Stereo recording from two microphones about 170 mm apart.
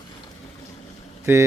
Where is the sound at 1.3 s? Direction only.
15° right (ahead or behind).